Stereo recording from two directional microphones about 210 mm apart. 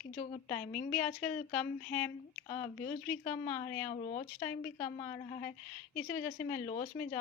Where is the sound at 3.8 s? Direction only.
35° left (ahead or behind).